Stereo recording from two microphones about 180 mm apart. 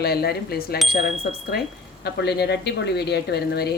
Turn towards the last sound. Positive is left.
turn(degrees=65)  # may be behind; listen again after turning